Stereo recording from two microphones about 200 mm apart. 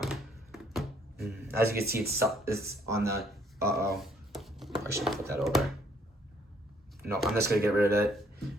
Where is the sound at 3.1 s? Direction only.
55° right (ahead or behind).